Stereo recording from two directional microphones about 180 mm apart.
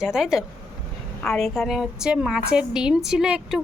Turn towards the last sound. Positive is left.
turn(degrees=-5)  # may be behind; listen again after turning